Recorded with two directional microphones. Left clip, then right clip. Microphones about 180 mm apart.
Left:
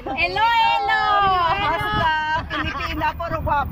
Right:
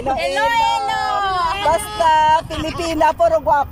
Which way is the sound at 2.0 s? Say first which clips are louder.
Right 11 dB; 45° right (ahead or behind).